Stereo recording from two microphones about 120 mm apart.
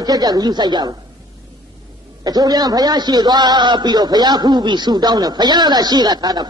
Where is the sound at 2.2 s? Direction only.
35° right (ahead or behind).